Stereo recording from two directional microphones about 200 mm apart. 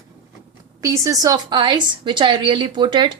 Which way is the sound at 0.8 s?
15° right (ahead or behind).